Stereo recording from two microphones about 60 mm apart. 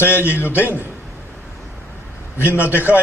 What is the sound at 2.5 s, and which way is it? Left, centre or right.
Speech, left.